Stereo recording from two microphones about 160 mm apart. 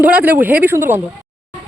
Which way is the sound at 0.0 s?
10° right (ahead or behind).